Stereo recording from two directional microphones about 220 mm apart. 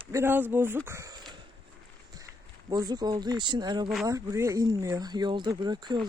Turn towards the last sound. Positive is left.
turn(degrees=-20)  # may be behind; listen again after turning